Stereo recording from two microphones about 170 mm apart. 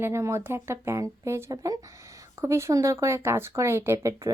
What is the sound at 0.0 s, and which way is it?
A woman's voice, 15° right (ahead or behind).